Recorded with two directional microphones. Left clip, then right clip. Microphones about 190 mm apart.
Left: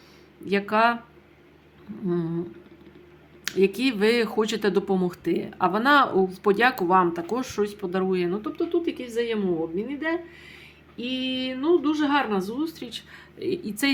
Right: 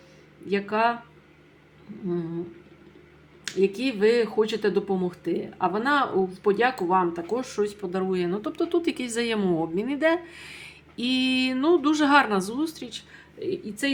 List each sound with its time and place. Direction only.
0.4 s speech: 15° left (ahead or behind)
2.0 s speech: 15° left (ahead or behind)
3.4 s speech: 15° left (ahead or behind)
8.4 s speech: 10° right (ahead or behind)
8.7 s a woman's voice: 25° right (ahead or behind); by 13.0 s 5° right (ahead or behind)
13.1 s a woman's voice: 15° left (ahead or behind)